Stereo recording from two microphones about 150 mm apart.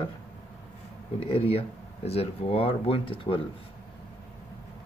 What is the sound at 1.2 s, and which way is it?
Speech, 40° left (ahead or behind).